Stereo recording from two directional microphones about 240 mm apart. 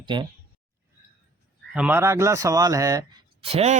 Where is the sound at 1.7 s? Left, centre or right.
Centre.